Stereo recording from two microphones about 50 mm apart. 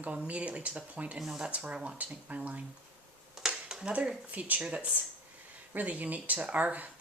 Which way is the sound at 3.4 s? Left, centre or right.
Centre.